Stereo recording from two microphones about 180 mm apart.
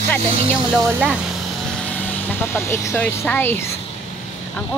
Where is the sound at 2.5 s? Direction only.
15° left (ahead or behind).